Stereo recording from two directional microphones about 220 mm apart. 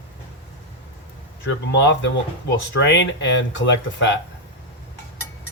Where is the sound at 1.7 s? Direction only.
55° left (ahead or behind).